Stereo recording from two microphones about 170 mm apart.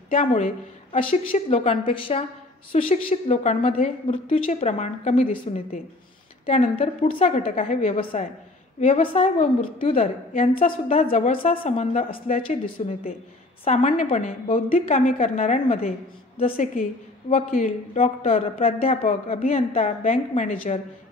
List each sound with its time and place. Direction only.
0.1 s a woman's voice: 40° left (ahead or behind)
2.7 s a woman's voice: 40° left (ahead or behind)
6.4 s a woman's voice: 40° left (ahead or behind)
8.0 s a woman's voice: 30° left (ahead or behind); by 9.8 s 50° left (ahead or behind)
9.8 s a woman's voice: 35° left (ahead or behind)
17.3 s a woman's voice: 40° left (ahead or behind)